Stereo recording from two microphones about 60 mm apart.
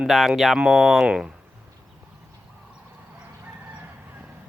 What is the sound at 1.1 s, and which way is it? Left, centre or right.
Speech, centre.